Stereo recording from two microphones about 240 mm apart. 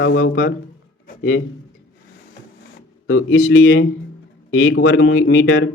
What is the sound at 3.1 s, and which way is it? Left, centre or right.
Speech, left.